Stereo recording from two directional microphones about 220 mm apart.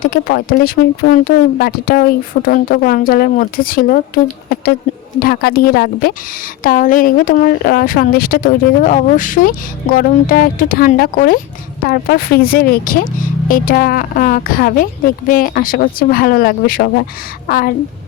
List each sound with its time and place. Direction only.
0.0 s a woman's voice: 40° left (ahead or behind)